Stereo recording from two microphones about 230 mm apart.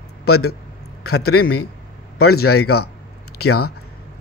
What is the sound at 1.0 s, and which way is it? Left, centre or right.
Speech, left.